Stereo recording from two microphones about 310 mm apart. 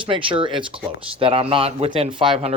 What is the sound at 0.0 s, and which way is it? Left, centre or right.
Speech, centre.